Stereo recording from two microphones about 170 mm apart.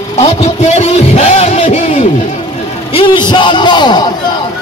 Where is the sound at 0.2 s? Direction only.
40° left (ahead or behind).